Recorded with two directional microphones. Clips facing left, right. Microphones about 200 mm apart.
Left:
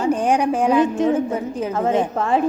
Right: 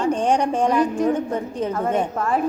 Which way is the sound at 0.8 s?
25° left (ahead or behind).